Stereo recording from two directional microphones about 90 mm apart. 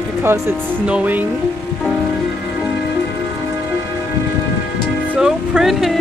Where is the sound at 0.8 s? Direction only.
15° right (ahead or behind).